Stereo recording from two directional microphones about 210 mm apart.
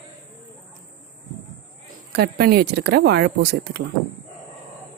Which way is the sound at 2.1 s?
50° right (ahead or behind).